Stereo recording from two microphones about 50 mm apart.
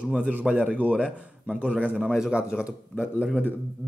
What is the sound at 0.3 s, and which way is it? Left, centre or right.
Speech, right.